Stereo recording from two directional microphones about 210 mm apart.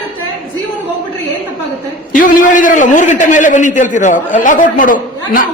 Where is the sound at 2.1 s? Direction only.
40° left (ahead or behind).